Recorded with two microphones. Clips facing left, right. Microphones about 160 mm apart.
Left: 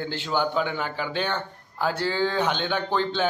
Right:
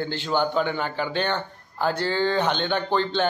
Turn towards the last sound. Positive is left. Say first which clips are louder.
# right 2 dB
turn(degrees=5)  # may be behind; listen again after turning